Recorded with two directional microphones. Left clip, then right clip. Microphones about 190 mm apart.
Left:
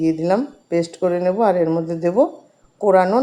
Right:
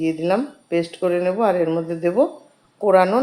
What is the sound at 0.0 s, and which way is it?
A woman's voice, 25° left (ahead or behind).